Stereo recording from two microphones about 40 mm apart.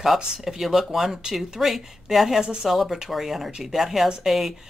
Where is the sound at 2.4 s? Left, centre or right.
Centre.